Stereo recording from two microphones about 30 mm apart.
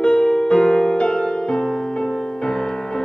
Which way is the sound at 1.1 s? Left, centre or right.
Centre.